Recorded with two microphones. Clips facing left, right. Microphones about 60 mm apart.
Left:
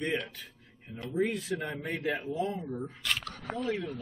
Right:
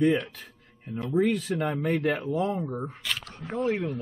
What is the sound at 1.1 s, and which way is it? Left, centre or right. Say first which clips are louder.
Speech: right 6 dB; right.